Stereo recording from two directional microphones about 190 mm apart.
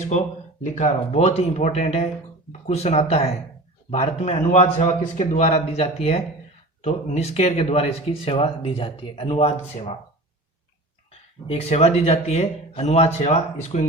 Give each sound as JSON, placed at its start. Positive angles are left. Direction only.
{"t": 0.6, "sound": "speech", "side_deg": 35}
{"t": 11.4, "sound": "speech", "side_deg": 35}